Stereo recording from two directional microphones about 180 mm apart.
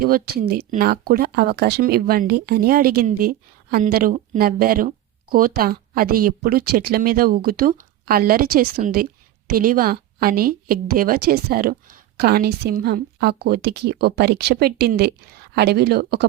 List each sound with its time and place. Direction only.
0.0 s speech: 55° right (ahead or behind)